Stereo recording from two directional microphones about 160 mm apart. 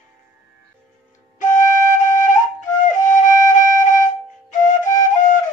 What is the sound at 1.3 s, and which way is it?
Flute, 50° left (ahead or behind).